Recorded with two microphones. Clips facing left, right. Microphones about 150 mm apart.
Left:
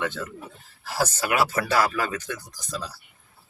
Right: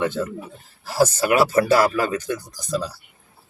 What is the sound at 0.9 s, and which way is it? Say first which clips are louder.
Speech: right 7 dB; 40° right (ahead or behind).